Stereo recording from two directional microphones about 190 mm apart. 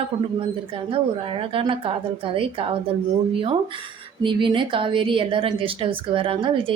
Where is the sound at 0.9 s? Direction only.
30° right (ahead or behind).